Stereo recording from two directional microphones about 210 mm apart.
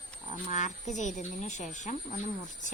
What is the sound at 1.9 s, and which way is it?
Speech, 40° left (ahead or behind).